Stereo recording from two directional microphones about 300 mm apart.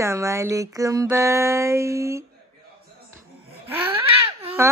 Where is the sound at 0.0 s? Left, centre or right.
Centre.